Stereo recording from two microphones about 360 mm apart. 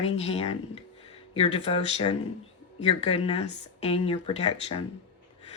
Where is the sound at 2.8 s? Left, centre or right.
Centre.